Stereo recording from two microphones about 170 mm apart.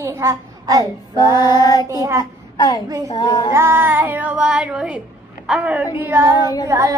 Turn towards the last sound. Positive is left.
turn(degrees=-20)  # may be behind; listen again after turning